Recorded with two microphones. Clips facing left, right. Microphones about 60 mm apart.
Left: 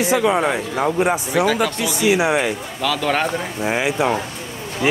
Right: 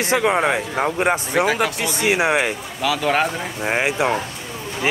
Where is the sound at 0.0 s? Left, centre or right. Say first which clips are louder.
Left 1 dB; right.